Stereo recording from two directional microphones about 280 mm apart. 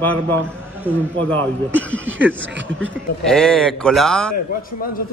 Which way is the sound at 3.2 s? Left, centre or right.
Centre.